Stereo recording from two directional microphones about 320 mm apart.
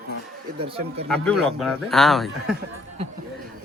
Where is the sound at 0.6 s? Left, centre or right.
Centre.